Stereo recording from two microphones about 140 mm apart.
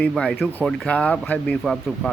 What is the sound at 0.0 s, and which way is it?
Speech, 5° left (ahead or behind).